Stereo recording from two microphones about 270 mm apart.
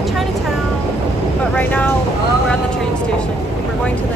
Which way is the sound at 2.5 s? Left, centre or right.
Centre.